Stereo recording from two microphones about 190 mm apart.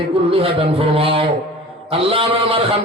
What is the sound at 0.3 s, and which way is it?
A man's voice, 30° right (ahead or behind).